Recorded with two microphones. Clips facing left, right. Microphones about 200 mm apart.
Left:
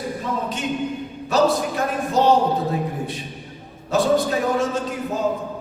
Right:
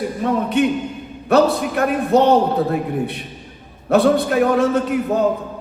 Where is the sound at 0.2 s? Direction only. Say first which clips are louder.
Right 11 dB; 60° right (ahead or behind).